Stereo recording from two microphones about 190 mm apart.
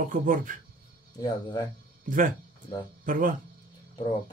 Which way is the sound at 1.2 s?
20° left (ahead or behind).